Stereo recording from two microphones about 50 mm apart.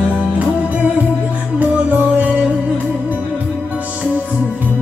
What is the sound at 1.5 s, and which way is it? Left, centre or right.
Music, right.